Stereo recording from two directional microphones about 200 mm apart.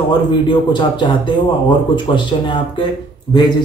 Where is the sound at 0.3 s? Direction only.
25° left (ahead or behind).